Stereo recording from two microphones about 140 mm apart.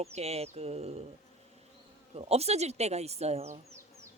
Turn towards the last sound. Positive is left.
turn(degrees=-50)  # may be behind; listen again after turning